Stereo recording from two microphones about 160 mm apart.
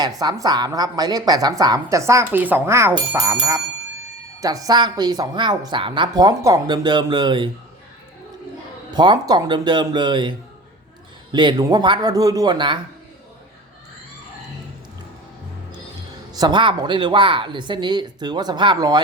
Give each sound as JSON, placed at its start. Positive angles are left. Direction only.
{"t": 0.0, "sound": "speech", "side_deg": -25}
{"t": 8.9, "sound": "speech", "side_deg": -25}
{"t": 16.3, "sound": "speech", "side_deg": -25}